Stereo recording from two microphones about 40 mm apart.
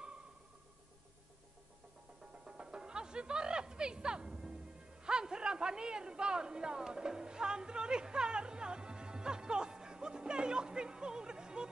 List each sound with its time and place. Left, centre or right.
2.4 s music: right